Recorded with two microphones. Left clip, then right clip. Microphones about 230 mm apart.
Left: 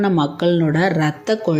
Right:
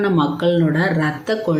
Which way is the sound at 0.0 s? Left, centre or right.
Left.